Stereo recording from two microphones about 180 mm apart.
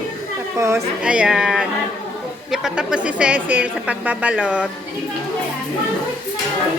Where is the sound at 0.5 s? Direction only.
15° right (ahead or behind).